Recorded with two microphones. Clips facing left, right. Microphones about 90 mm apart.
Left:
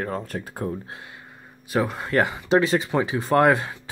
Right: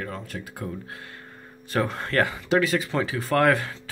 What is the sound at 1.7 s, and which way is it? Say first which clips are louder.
Speech: left 2 dB; 10° left (ahead or behind).